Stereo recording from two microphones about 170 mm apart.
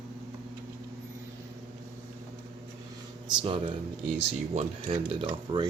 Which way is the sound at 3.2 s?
30° right (ahead or behind).